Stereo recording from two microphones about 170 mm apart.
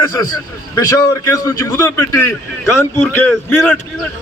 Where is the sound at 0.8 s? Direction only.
15° left (ahead or behind).